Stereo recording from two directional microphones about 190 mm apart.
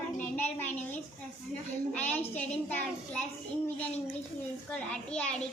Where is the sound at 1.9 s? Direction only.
10° left (ahead or behind).